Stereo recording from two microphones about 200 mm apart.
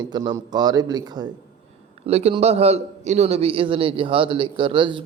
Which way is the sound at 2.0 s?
30° right (ahead or behind).